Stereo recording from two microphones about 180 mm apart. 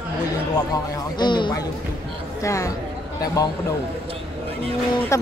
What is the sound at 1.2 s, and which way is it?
Speech, 25° left (ahead or behind).